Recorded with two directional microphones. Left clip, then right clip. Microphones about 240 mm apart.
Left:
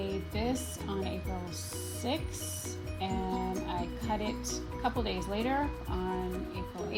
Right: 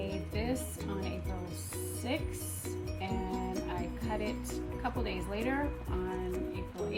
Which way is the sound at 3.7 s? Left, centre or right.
Left.